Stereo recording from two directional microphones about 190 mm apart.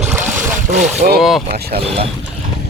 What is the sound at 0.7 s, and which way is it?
Speech, 45° right (ahead or behind).